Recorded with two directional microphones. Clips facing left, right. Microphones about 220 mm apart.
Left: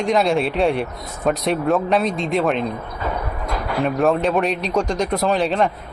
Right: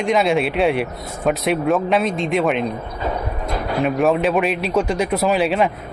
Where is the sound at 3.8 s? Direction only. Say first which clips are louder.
Right 1 dB; centre (ahead or behind).